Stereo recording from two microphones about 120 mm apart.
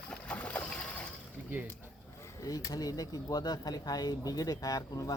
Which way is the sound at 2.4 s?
30° left (ahead or behind).